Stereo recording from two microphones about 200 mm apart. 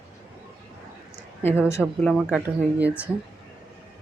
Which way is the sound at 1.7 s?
15° left (ahead or behind).